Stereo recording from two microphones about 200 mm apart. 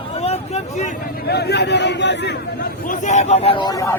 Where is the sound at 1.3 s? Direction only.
55° left (ahead or behind).